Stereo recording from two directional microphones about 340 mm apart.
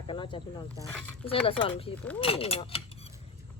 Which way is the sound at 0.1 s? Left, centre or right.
Centre.